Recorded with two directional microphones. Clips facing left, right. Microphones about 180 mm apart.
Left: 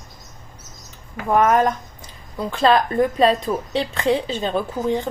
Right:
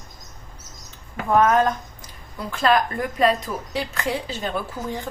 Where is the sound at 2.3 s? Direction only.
25° left (ahead or behind).